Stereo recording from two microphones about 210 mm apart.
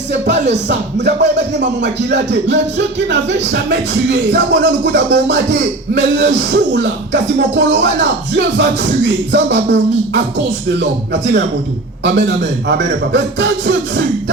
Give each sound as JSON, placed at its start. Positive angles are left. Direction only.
{"t": 0.1, "sound": "speech", "side_deg": -55}